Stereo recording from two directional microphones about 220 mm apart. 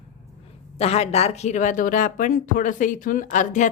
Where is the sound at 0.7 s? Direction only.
30° left (ahead or behind).